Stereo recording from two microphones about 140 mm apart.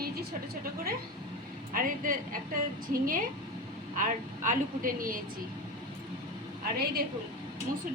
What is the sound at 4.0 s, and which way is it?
A woman's voice, 65° right (ahead or behind).